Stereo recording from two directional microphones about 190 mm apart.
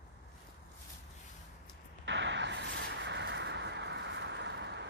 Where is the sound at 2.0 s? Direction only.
70° right (ahead or behind).